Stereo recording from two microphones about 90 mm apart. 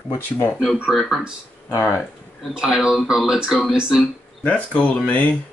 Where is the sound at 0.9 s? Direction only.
Centre (ahead or behind).